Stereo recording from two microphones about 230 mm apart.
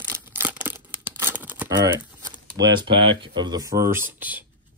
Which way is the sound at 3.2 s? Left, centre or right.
Centre.